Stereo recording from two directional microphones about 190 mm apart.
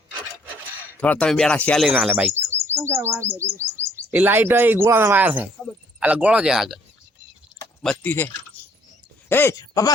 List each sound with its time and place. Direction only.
0.9 s speech: 5° left (ahead or behind)
1.9 s speech: 10° right (ahead or behind)
7.8 s speech: 5° left (ahead or behind)
9.3 s speech: 10° left (ahead or behind)